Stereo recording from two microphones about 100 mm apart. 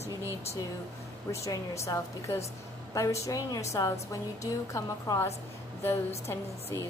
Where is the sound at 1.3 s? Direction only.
30° left (ahead or behind).